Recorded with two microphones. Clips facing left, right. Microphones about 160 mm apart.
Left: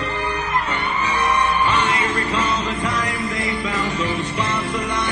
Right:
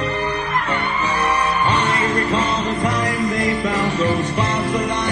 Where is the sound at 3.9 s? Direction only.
35° right (ahead or behind).